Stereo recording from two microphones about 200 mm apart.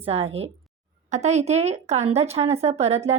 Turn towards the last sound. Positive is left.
turn(degrees=-30)  # may be behind; listen again after turning